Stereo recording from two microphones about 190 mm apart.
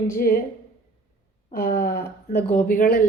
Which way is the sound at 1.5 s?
50° left (ahead or behind).